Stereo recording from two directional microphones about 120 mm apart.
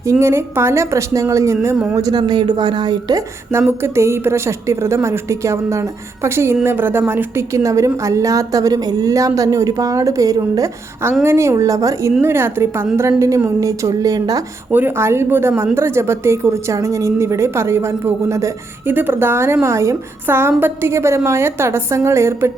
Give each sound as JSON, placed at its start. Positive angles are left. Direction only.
{"t": 0.0, "sound": "a woman's voice", "side_deg": -25}
{"t": 3.7, "sound": "a woman's voice", "side_deg": -20}
{"t": 14.7, "sound": "a woman's voice", "side_deg": -15}